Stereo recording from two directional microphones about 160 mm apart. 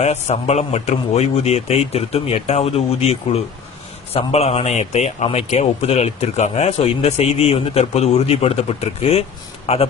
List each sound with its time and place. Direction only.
0.0 s a man's voice: 40° left (ahead or behind)